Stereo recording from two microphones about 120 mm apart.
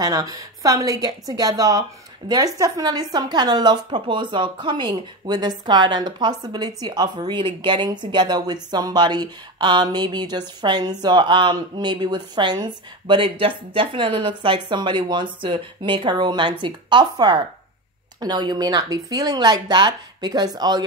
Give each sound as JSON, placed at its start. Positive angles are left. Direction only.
{"t": 0.0, "sound": "a woman's voice", "side_deg": -30}